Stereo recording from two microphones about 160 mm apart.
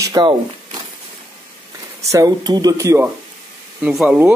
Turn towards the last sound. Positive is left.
turn(degrees=-5)  # may be behind; listen again after turning